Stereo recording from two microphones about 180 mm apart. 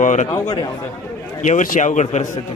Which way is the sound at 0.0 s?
40° left (ahead or behind).